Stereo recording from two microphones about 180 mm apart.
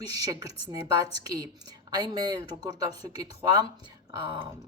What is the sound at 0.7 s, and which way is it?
Speech, 20° right (ahead or behind).